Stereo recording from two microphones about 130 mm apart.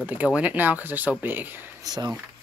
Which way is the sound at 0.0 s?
10° right (ahead or behind).